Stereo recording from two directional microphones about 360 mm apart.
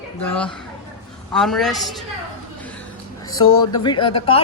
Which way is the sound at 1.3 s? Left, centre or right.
Centre.